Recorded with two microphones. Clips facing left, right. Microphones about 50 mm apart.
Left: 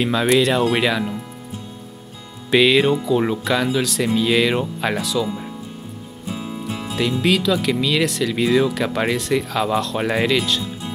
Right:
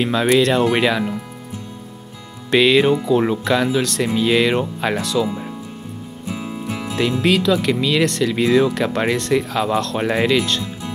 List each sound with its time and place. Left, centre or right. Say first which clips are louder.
0.0 s speech: right 1 dB; centre
2.5 s speech: right 1 dB; centre
6.3 s music: right 1 dB; right
7.0 s speech: right 2 dB; centre